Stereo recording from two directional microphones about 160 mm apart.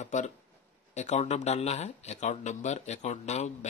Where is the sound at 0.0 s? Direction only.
50° left (ahead or behind).